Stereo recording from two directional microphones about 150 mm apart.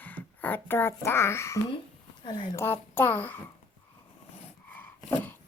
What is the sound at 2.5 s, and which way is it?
Speech, 15° left (ahead or behind).